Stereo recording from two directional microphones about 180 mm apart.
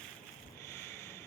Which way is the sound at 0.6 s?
15° left (ahead or behind).